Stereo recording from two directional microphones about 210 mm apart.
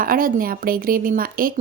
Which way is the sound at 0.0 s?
40° right (ahead or behind).